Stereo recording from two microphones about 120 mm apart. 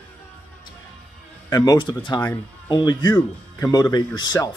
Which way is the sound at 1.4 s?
35° left (ahead or behind).